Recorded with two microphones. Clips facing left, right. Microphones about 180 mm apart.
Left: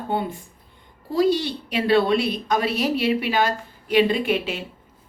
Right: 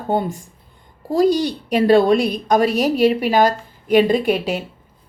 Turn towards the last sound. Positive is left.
turn(degrees=-40)  # may be behind; listen again after turning